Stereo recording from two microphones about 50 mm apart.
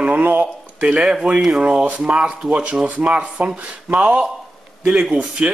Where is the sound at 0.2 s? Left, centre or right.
Right.